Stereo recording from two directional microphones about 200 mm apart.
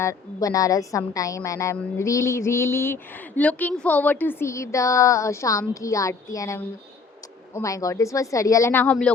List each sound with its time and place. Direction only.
0.0 s a woman's voice: 15° left (ahead or behind)